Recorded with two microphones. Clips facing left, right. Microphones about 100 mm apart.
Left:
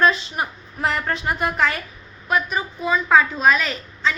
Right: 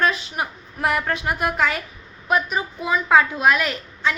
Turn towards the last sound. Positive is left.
turn(degrees=-10)  # may be behind; listen again after turning